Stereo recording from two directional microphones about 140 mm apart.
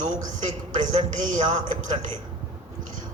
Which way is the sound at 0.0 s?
65° right (ahead or behind).